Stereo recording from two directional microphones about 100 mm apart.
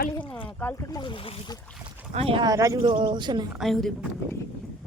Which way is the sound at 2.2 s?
70° right (ahead or behind).